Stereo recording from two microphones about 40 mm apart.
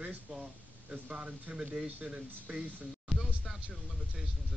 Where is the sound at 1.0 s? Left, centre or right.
Right.